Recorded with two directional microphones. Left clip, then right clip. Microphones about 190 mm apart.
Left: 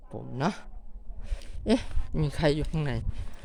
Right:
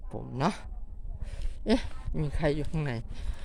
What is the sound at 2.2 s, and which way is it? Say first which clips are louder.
Speech: left 3 dB; 25° left (ahead or behind).